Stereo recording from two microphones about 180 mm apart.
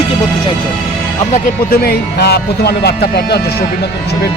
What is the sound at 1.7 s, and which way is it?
Speech, 60° left (ahead or behind).